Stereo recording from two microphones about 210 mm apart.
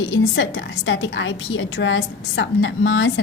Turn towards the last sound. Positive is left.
turn(degrees=60)  # may be behind; listen again after turning